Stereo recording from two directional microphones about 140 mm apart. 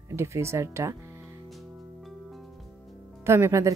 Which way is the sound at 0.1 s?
20° right (ahead or behind).